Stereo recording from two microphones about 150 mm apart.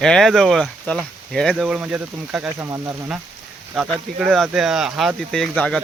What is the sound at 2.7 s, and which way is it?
Speech, 20° right (ahead or behind).